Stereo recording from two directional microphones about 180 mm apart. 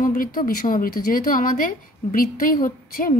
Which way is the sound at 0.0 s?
50° left (ahead or behind).